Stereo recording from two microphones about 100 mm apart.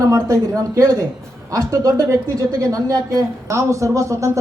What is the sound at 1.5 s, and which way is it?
Speech, 35° right (ahead or behind).